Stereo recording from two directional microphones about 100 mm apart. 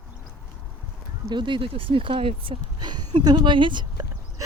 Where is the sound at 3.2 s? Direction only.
45° right (ahead or behind).